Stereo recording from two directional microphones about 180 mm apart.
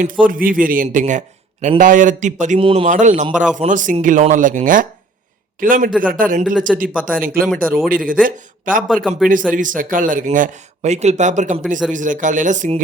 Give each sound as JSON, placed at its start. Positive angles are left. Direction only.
{"t": 0.0, "sound": "speech", "side_deg": -50}
{"t": 6.7, "sound": "speech", "side_deg": 0}
{"t": 7.0, "sound": "speech", "side_deg": -50}
{"t": 7.4, "sound": "speech", "side_deg": 0}
{"t": 7.9, "sound": "speech", "side_deg": -50}
{"t": 9.0, "sound": "speech", "side_deg": 0}
{"t": 9.5, "sound": "speech", "side_deg": -50}